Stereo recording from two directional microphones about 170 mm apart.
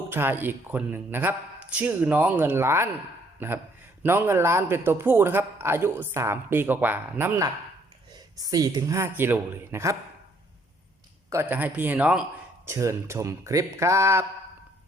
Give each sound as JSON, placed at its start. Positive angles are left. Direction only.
{"t": 0.1, "sound": "a man's voice", "side_deg": -10}
{"t": 11.3, "sound": "a man's voice", "side_deg": -15}